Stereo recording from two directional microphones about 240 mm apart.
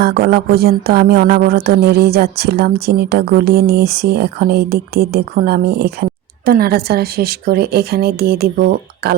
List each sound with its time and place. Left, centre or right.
0.0 s speech: right